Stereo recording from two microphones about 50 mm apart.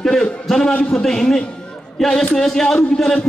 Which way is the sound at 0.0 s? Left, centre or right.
Centre.